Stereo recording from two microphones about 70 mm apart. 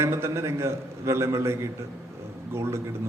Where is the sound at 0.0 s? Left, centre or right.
Right.